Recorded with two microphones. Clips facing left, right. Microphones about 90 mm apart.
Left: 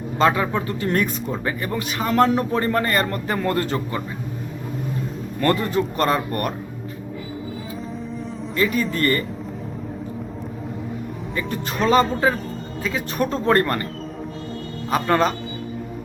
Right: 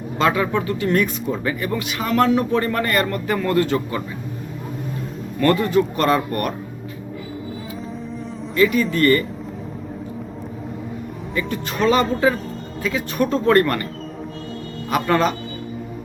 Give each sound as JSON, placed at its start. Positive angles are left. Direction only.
{"t": 0.2, "sound": "speech", "side_deg": 30}
{"t": 5.4, "sound": "speech", "side_deg": 35}
{"t": 8.5, "sound": "speech", "side_deg": 35}
{"t": 11.9, "sound": "speech", "side_deg": 35}
{"t": 14.8, "sound": "a man's voice", "side_deg": 30}